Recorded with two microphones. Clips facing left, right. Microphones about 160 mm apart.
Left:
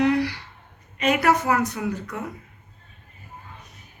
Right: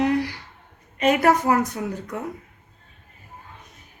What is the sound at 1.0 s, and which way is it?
A woman's voice, 45° right (ahead or behind).